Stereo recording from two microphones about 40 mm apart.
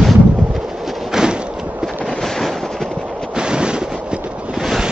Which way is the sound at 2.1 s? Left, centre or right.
Centre.